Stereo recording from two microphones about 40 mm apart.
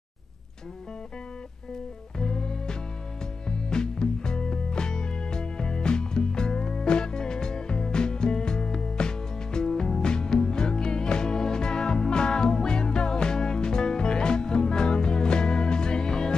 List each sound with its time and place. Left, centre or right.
2.1 s music: centre